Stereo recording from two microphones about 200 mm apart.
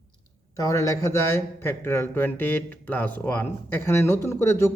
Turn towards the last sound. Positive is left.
turn(degrees=15)  # may be behind; listen again after turning